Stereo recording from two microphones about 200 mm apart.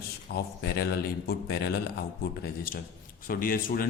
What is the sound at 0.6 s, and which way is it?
A man's voice, 50° left (ahead or behind).